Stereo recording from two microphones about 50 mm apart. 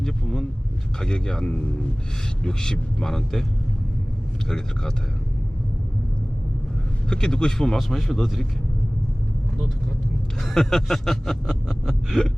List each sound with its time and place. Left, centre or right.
0.0 s vehicle: centre
0.9 s snicker: centre
4.4 s snicker: centre
7.1 s snicker: centre
7.8 s speech: centre
10.4 s snicker: centre